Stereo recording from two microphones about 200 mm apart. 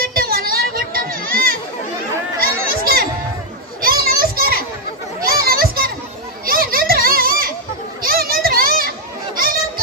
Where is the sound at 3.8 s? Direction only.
45° right (ahead or behind).